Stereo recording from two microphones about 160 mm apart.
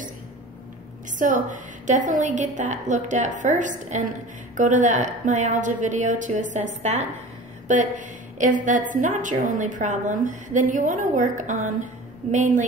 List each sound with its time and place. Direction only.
1.1 s a woman's voice: 55° right (ahead or behind)